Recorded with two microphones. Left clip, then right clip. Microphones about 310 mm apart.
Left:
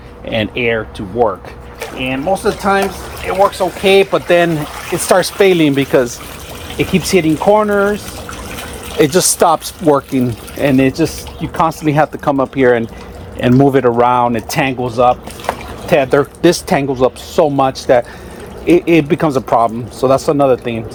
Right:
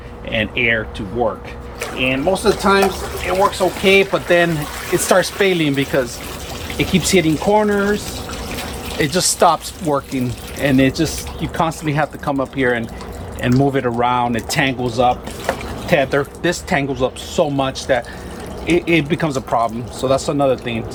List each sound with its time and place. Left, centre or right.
0.3 s speech: centre
3.8 s speech: centre
9.0 s speech: left